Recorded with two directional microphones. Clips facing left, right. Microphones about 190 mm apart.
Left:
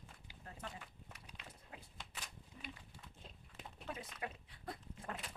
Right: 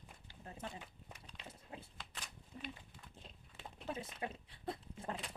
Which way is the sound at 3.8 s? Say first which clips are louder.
Right 3 dB; 25° right (ahead or behind).